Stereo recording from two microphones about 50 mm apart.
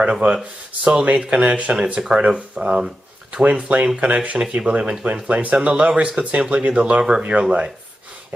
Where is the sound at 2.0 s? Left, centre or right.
Centre.